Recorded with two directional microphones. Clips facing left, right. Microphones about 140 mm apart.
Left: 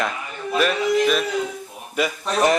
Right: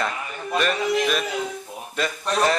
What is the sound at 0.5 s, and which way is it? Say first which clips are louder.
Music: left 3 dB; centre (ahead or behind).